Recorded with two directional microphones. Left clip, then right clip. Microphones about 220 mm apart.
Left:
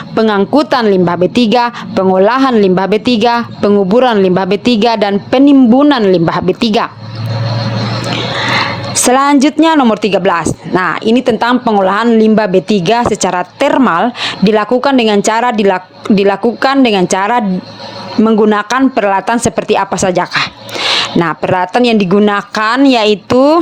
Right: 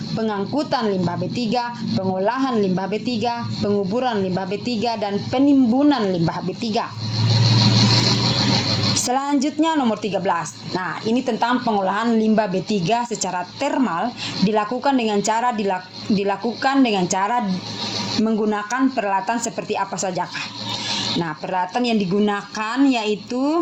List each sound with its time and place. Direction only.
0.2 s a woman's voice: 50° left (ahead or behind)
9.0 s a woman's voice: 50° left (ahead or behind)